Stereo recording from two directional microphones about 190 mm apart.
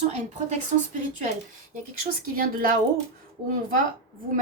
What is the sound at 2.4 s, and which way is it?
Speech, 50° right (ahead or behind).